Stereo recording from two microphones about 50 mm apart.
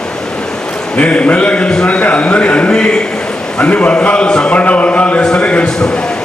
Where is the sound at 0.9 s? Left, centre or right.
Left.